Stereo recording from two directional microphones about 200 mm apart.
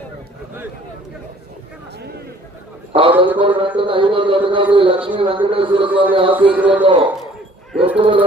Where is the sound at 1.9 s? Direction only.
55° right (ahead or behind).